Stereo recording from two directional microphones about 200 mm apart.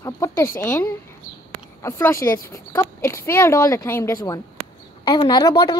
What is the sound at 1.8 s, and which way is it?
A woman's voice, 15° left (ahead or behind).